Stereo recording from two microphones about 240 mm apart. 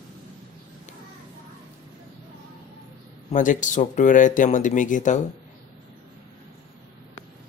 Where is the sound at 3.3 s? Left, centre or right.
Left.